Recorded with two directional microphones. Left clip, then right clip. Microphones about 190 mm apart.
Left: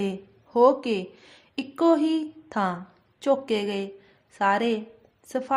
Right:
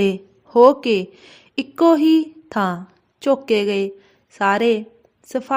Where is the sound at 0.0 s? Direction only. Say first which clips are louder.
Right 11 dB; 35° right (ahead or behind).